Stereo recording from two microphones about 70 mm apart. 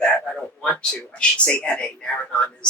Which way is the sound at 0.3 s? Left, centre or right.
Centre.